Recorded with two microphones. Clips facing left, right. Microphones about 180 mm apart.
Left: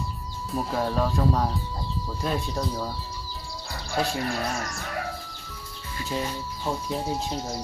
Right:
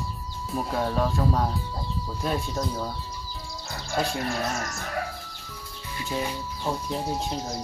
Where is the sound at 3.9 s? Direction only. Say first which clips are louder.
Even; centre (ahead or behind).